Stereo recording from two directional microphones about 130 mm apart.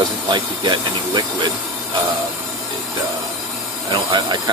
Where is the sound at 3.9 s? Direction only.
35° right (ahead or behind).